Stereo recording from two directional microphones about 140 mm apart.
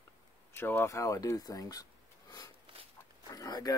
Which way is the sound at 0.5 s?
15° left (ahead or behind).